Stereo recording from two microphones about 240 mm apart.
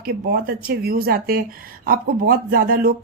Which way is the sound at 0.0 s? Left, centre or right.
Right.